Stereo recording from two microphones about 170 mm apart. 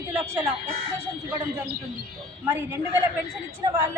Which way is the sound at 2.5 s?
15° right (ahead or behind).